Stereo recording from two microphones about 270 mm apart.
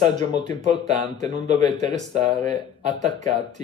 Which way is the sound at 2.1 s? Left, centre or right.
Right.